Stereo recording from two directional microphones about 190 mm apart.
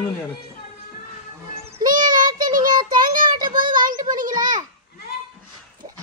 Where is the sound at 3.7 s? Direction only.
20° right (ahead or behind).